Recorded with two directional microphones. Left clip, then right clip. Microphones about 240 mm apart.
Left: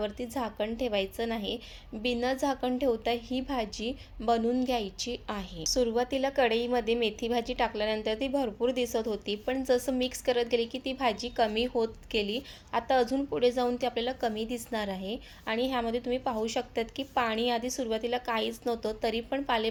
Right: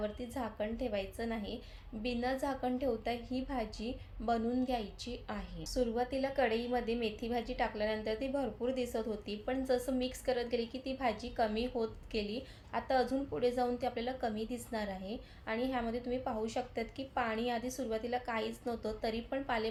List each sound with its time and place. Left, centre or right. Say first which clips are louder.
0.0 s a woman's voice: left 6 dB; left